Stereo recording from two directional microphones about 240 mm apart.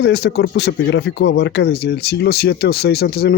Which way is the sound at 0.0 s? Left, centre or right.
Left.